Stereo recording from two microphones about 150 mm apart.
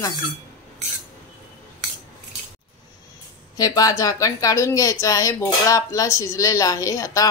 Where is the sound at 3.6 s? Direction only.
25° left (ahead or behind).